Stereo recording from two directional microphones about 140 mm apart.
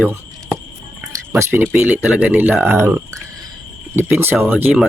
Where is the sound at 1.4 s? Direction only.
15° right (ahead or behind).